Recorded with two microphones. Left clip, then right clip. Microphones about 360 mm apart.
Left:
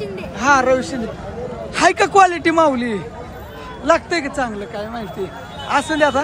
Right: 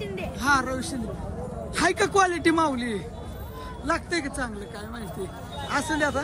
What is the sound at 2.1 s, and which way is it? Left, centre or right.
Speech, centre.